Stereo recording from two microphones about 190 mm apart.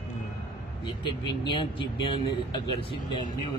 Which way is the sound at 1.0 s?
25° left (ahead or behind).